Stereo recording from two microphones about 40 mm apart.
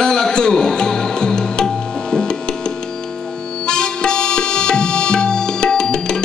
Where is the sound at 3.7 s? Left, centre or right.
Left.